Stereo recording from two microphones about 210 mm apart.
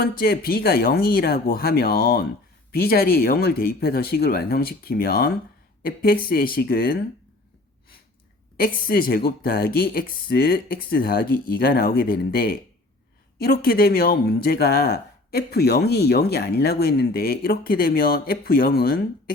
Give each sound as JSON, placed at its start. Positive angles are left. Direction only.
{"t": 0.0, "sound": "speech", "side_deg": 45}
{"t": 8.5, "sound": "speech", "side_deg": 45}